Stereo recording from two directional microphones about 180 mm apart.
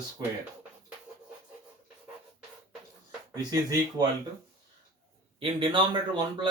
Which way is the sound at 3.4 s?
20° right (ahead or behind).